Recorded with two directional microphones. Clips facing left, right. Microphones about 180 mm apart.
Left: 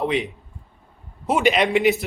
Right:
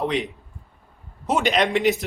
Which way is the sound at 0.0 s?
Centre (ahead or behind).